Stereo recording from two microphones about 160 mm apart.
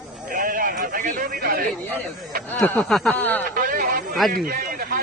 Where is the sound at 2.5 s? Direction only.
5° left (ahead or behind).